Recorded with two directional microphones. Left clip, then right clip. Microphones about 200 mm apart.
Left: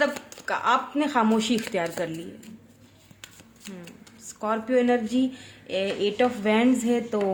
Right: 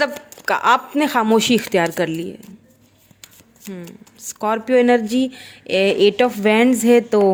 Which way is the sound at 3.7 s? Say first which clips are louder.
Right 8 dB; 30° right (ahead or behind).